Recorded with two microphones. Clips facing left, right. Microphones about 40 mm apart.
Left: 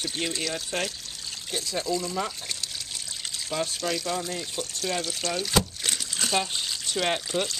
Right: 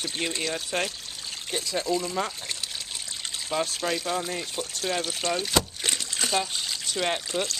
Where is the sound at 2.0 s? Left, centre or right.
Centre.